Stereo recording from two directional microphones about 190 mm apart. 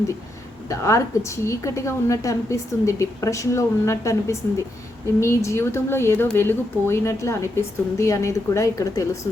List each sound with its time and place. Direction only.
0.7 s a woman's voice: 15° left (ahead or behind)